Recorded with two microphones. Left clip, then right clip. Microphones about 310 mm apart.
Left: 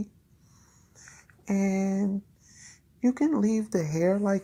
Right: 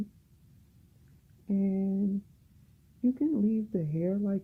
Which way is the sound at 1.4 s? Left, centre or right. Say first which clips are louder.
Left 4 dB; left.